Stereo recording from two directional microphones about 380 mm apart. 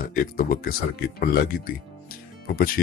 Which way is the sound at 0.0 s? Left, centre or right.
Left.